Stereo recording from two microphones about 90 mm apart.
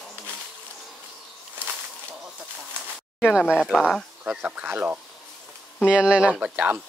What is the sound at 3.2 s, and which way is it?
Speech, 5° right (ahead or behind).